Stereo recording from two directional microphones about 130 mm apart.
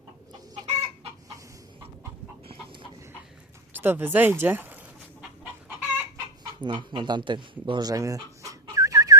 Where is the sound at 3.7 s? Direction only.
15° right (ahead or behind).